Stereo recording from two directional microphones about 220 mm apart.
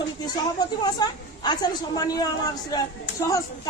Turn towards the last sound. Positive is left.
turn(degrees=15)  # may be behind; listen again after turning